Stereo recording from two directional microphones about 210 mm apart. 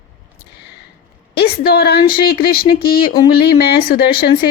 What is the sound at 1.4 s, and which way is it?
A woman's voice, 45° left (ahead or behind).